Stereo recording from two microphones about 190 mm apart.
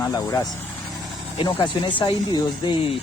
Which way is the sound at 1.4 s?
25° left (ahead or behind).